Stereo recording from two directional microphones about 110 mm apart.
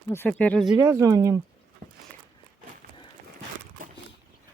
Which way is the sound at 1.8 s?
90° right.